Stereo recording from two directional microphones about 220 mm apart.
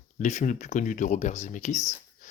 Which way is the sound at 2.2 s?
35° left (ahead or behind).